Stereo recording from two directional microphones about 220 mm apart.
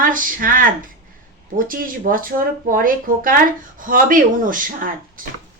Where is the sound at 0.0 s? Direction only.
40° right (ahead or behind).